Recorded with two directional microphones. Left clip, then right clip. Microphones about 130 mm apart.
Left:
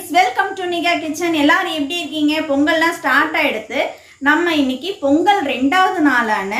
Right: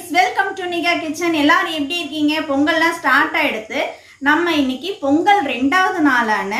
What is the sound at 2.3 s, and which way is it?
A woman's voice, centre (ahead or behind).